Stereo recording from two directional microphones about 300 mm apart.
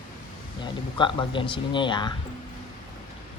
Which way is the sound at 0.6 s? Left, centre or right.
Centre.